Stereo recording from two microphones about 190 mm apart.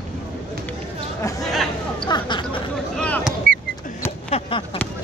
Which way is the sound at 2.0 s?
25° left (ahead or behind).